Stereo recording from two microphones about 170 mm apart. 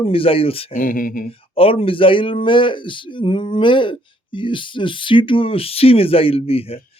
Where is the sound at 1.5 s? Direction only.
35° left (ahead or behind).